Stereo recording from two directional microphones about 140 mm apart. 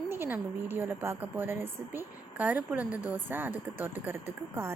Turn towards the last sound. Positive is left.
turn(degrees=-15)  # may be behind; listen again after turning